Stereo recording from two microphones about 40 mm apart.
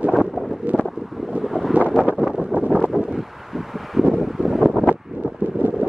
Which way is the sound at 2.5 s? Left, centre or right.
Right.